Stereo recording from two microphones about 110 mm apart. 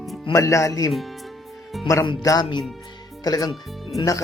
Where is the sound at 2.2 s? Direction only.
35° left (ahead or behind).